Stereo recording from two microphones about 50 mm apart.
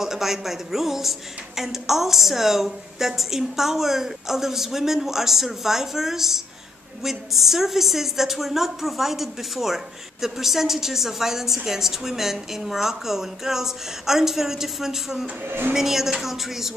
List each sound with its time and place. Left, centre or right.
0.0 s a woman's voice: centre
15.4 s speech: right
15.7 s a woman's voice: centre